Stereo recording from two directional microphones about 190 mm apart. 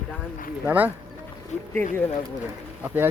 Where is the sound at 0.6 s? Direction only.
10° right (ahead or behind).